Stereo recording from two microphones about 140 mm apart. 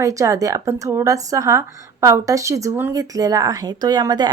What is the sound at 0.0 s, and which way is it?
A woman's voice, 25° right (ahead or behind).